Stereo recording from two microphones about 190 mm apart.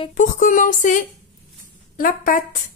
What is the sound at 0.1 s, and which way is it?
A woman's voice, 40° left (ahead or behind).